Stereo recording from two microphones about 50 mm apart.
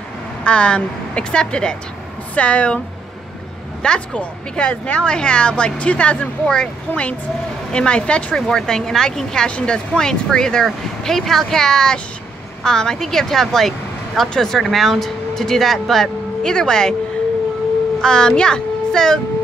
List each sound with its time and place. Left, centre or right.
0.4 s a woman's voice: left
3.8 s a woman's voice: left
7.7 s a woman's voice: centre
8.4 s speech: centre
18.0 s a child's voice: centre